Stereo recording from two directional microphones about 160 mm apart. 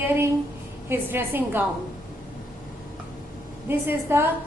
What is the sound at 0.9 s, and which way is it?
Speech, 15° right (ahead or behind).